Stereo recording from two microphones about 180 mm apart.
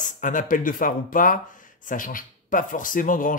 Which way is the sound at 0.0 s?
45° left (ahead or behind).